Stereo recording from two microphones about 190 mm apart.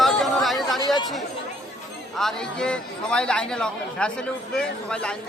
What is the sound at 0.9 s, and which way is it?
Chatter, 20° left (ahead or behind).